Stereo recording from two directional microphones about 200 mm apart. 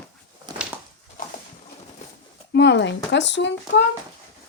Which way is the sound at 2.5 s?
60° left (ahead or behind).